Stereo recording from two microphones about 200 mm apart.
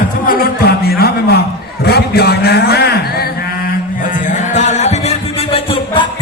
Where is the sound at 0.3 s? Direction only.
45° left (ahead or behind).